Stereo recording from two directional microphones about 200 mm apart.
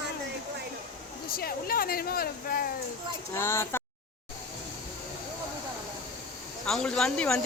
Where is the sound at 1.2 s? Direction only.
50° left (ahead or behind).